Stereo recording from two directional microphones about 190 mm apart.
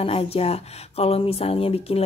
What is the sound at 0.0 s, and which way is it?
Speech, 30° left (ahead or behind).